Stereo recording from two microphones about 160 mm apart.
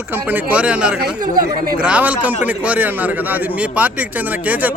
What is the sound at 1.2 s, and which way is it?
Speech, 65° right (ahead or behind).